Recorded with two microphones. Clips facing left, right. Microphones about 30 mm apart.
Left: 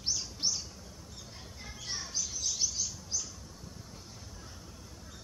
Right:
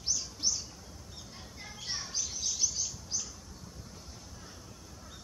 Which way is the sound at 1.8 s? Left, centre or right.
Centre.